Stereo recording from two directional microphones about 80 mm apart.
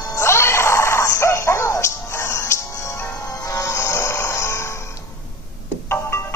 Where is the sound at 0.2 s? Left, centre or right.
Left.